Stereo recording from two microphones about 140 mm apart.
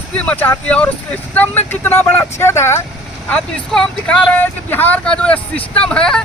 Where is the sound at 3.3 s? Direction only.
5° left (ahead or behind).